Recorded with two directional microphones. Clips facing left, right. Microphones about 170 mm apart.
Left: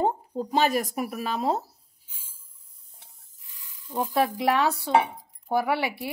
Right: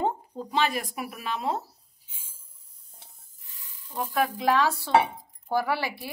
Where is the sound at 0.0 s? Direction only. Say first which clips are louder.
Left 3 dB; 40° left (ahead or behind).